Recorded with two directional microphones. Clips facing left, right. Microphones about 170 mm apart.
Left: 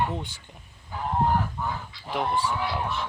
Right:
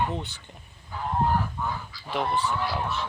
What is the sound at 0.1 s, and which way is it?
Speech, 10° left (ahead or behind).